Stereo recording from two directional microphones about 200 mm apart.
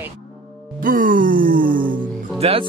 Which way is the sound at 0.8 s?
45° right (ahead or behind).